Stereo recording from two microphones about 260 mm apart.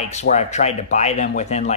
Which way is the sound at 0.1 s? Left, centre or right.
Left.